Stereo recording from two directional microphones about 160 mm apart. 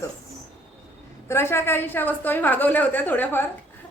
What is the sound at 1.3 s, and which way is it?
A woman's voice, 15° left (ahead or behind).